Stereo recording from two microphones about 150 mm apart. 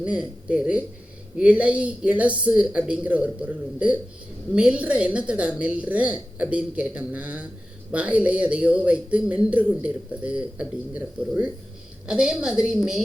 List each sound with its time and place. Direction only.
0.0 s a woman's voice: 10° right (ahead or behind)